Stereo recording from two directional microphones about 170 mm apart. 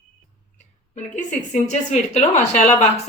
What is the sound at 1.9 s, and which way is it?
A woman's voice, 40° left (ahead or behind).